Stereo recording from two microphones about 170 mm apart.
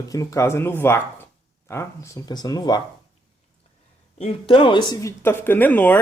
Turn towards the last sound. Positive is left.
turn(degrees=10)  # may be behind; listen again after turning